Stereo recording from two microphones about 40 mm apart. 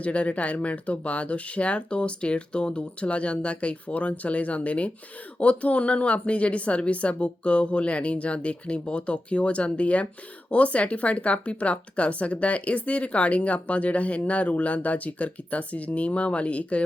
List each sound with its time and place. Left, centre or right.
0.0 s speech: left